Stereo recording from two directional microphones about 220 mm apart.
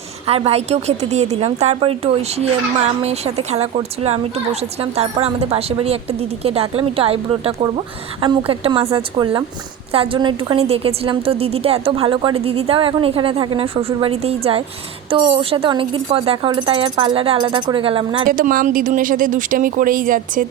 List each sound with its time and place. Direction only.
0.3 s a woman's voice: 25° right (ahead or behind)
18.3 s speech: 40° right (ahead or behind)